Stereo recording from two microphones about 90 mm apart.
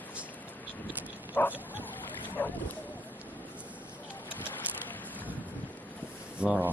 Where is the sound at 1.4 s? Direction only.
25° left (ahead or behind).